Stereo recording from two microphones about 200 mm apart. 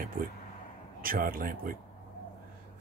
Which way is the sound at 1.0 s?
45° right (ahead or behind).